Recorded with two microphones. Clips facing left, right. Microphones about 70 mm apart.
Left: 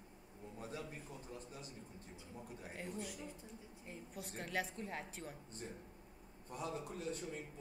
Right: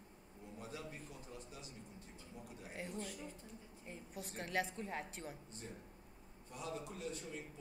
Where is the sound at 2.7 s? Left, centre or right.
Centre.